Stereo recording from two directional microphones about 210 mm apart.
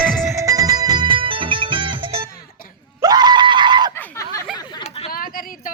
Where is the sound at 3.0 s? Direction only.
20° right (ahead or behind).